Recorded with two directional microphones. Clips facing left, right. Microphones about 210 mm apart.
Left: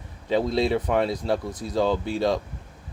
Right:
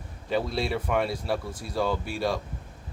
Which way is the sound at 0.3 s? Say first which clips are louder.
Left 5 dB; 20° left (ahead or behind).